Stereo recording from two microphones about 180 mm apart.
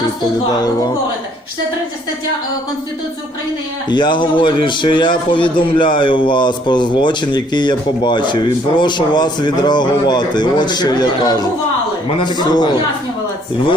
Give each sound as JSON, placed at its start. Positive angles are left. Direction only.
{"t": 3.8, "sound": "speech", "side_deg": 25}